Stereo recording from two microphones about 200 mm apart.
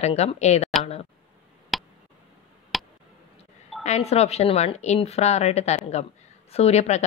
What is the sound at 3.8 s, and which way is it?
A woman's voice, 35° left (ahead or behind).